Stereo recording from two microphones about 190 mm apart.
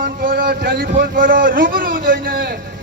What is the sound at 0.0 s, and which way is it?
Speech, 50° right (ahead or behind).